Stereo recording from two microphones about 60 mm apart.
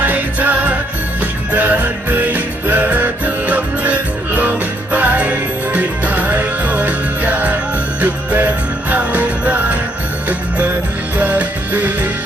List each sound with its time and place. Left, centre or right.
0.0 s music: right
11.2 s music: right